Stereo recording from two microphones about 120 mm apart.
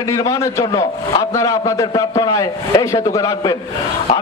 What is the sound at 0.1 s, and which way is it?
A man's voice, 30° left (ahead or behind).